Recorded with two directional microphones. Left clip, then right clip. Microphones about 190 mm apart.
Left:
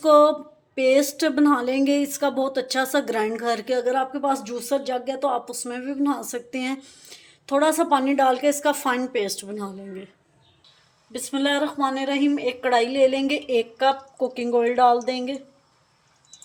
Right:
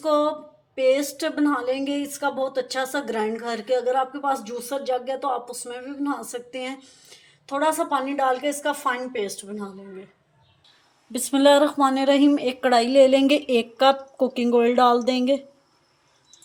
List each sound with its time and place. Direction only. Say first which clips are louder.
0.0 s speech: left 6 dB; 35° left (ahead or behind)
11.1 s a woman's voice: right 7 dB; 30° right (ahead or behind)